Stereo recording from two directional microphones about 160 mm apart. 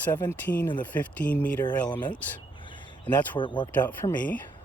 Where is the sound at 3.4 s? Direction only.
30° left (ahead or behind).